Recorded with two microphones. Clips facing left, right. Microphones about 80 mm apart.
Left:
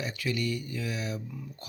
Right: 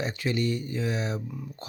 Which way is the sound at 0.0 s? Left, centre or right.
Right.